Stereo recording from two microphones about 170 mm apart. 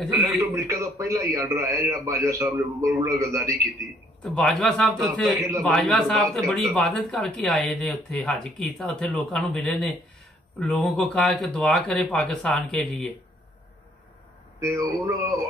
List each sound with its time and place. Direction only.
0.5 s a man's voice: 15° right (ahead or behind)
4.2 s speech: 5° left (ahead or behind)
14.6 s a man's voice: 20° right (ahead or behind)